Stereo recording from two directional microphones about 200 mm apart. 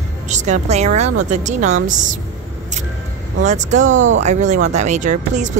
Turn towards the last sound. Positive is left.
turn(degrees=-40)  # may be behind; listen again after turning